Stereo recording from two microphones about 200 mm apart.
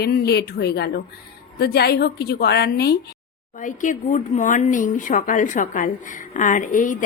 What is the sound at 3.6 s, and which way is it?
A woman's voice, 40° left (ahead or behind).